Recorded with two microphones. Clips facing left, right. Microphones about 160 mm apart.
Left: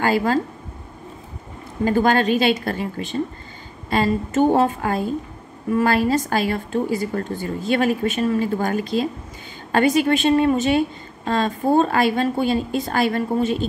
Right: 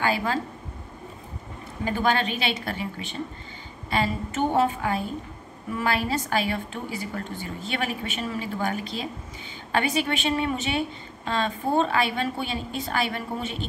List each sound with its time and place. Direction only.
0.0 s a woman's voice: 45° left (ahead or behind)
1.9 s a woman's voice: 45° left (ahead or behind)
3.9 s a woman's voice: 45° left (ahead or behind)